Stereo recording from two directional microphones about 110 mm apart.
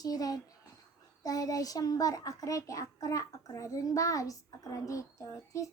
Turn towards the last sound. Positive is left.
turn(degrees=30)  # may be behind; listen again after turning